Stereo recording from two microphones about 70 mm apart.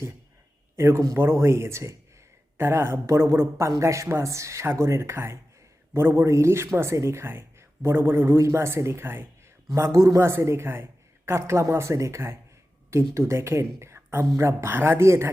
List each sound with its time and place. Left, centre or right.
0.8 s speech: right
9.7 s speech: right